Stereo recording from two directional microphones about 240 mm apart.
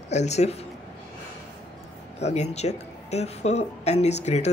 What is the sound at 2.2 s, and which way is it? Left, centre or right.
Speech, left.